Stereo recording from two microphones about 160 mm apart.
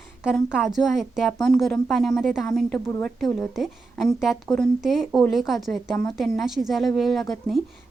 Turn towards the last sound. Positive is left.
turn(degrees=0)  # may be behind; listen again after turning